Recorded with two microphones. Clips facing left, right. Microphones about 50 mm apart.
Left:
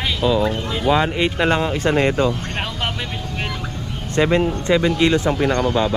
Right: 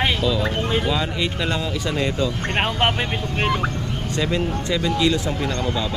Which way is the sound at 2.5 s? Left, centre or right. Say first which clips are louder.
Right 5 dB; right.